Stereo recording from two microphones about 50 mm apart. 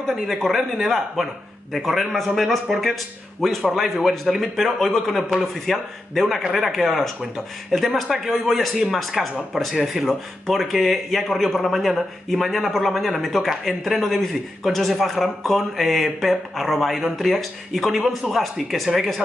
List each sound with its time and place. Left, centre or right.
0.1 s speech: centre